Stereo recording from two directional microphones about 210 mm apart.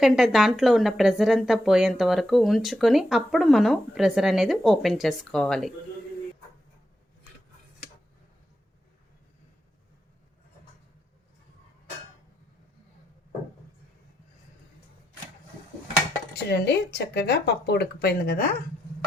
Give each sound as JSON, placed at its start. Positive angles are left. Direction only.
{"t": 0.0, "sound": "speech", "side_deg": 0}
{"t": 16.5, "sound": "speech", "side_deg": 50}